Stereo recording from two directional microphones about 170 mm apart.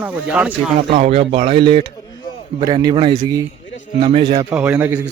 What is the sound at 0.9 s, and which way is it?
A man's voice, 35° right (ahead or behind).